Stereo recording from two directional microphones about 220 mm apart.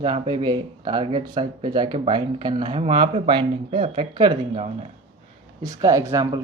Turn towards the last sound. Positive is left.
turn(degrees=-15)  # may be behind; listen again after turning